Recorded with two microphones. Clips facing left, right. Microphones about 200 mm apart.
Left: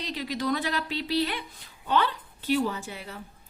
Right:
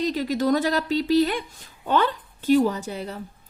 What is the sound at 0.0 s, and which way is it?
A woman's voice, 45° right (ahead or behind).